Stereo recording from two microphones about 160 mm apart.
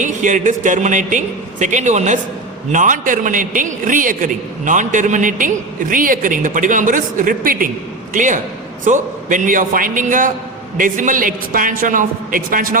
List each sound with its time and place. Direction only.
0.0 s a man's voice: 50° right (ahead or behind)
8.1 s a man's voice: 50° right (ahead or behind)